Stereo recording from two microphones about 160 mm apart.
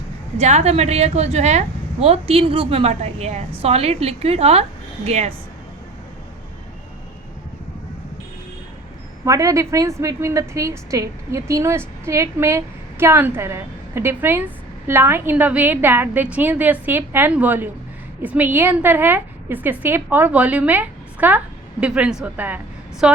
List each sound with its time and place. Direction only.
0.3 s a woman's voice: 45° right (ahead or behind)
9.2 s a woman's voice: 20° right (ahead or behind)